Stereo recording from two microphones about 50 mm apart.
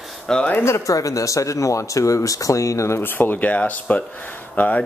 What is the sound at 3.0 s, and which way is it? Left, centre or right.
Speech, left.